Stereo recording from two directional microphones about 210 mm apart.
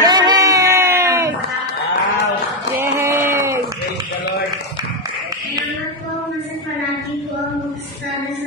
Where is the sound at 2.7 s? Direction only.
10° right (ahead or behind).